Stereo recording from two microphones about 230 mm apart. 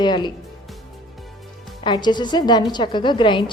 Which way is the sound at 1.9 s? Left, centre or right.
Centre.